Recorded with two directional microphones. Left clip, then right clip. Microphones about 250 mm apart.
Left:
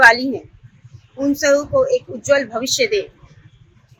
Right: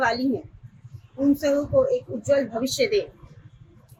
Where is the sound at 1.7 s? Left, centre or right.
Left.